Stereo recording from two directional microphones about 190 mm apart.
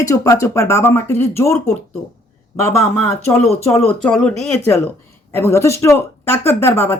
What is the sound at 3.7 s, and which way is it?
Speech, 5° left (ahead or behind).